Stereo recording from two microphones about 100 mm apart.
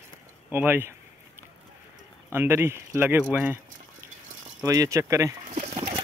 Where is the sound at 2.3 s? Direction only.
25° right (ahead or behind).